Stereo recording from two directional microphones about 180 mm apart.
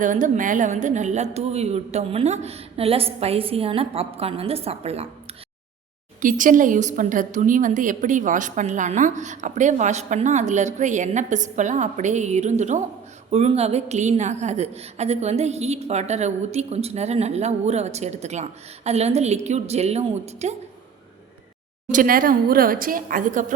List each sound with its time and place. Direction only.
0.0 s a woman's voice: 45° right (ahead or behind)
6.2 s a woman's voice: 45° right (ahead or behind)
21.8 s a woman's voice: 50° right (ahead or behind)